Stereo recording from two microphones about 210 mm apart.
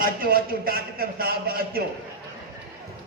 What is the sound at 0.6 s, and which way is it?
A man's voice, 45° right (ahead or behind).